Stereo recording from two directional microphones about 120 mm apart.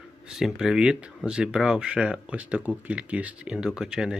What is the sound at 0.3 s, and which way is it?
Speech, 5° right (ahead or behind).